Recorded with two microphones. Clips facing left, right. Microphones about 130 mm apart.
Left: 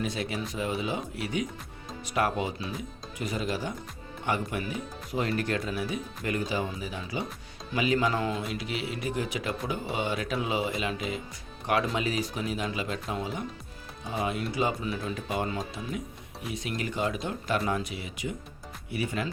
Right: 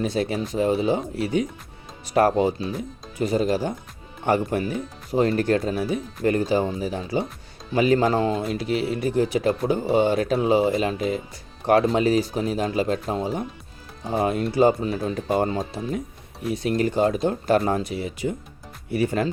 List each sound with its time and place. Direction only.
0.0 s speech: 35° right (ahead or behind)